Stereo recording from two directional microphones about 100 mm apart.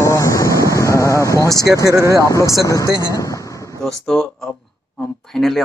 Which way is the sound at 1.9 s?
30° right (ahead or behind).